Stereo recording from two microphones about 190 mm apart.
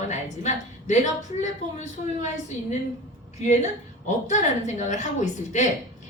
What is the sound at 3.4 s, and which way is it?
A woman's voice, 40° left (ahead or behind).